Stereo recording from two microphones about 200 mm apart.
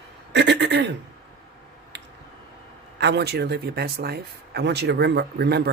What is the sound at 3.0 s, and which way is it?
Speech, 55° right (ahead or behind).